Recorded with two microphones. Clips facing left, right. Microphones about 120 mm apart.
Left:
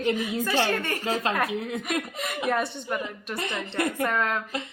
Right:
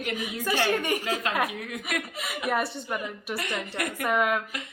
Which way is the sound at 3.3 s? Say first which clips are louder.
Left 4 dB; 30° left (ahead or behind).